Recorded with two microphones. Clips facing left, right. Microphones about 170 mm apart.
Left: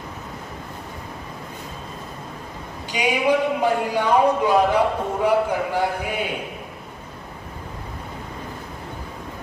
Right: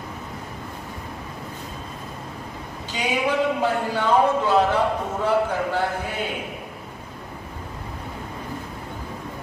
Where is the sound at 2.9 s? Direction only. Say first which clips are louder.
Left 4 dB; 15° left (ahead or behind).